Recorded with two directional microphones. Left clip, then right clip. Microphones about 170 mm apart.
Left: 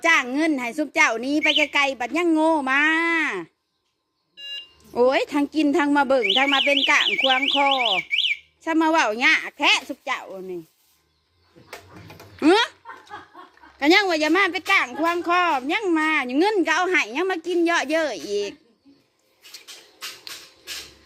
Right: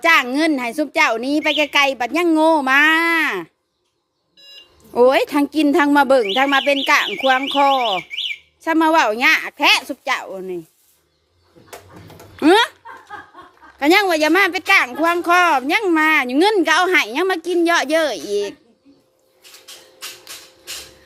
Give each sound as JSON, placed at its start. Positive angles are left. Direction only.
{"t": 0.0, "sound": "speech", "side_deg": -5}
{"t": 4.9, "sound": "speech", "side_deg": -10}
{"t": 12.4, "sound": "a sound", "side_deg": -5}
{"t": 13.7, "sound": "speech", "side_deg": -5}